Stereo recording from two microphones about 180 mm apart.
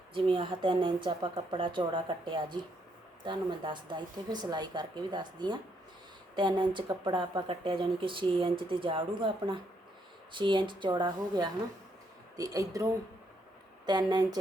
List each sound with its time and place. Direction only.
0.1 s speech: 30° right (ahead or behind)